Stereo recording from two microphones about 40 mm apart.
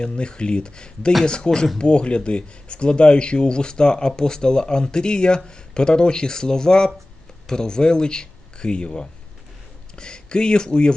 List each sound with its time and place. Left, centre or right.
0.0 s speech: left
1.5 s speech: centre
1.8 s speech: left